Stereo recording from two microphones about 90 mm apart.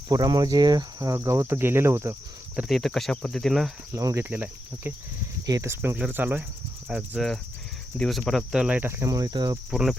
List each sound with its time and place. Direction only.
0.1 s cricket: 45° right (ahead or behind)
2.6 s cricket: centre (ahead or behind)
3.9 s cricket: 35° right (ahead or behind)
4.3 s cricket: 20° right (ahead or behind)
5.5 s cricket: 35° right (ahead or behind)
6.8 s speech: 10° right (ahead or behind)
7.9 s cricket: 5° left (ahead or behind)
8.6 s speech: 15° right (ahead or behind)
8.9 s cricket: 30° right (ahead or behind)
9.3 s cricket: 50° right (ahead or behind)